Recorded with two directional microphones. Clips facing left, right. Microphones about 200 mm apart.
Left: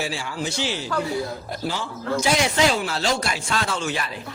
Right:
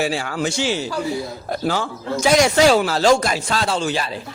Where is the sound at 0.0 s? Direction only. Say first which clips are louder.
Right 6 dB; 65° right (ahead or behind).